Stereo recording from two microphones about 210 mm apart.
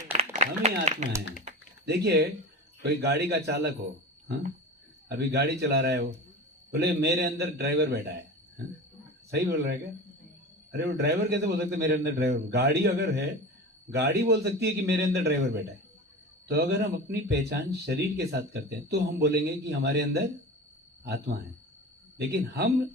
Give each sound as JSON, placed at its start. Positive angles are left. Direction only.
{"t": 0.1, "sound": "a sound", "side_deg": -30}
{"t": 1.8, "sound": "speech", "side_deg": -50}
{"t": 5.0, "sound": "speech", "side_deg": -55}
{"t": 9.3, "sound": "speech", "side_deg": -50}
{"t": 16.5, "sound": "speech", "side_deg": -50}